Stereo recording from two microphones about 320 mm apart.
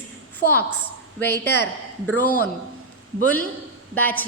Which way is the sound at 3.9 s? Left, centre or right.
Centre.